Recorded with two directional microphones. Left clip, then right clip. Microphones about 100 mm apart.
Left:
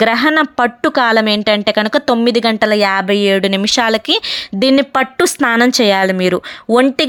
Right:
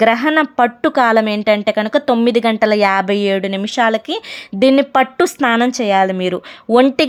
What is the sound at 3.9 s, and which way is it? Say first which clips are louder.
Speech: left 4 dB; 20° left (ahead or behind).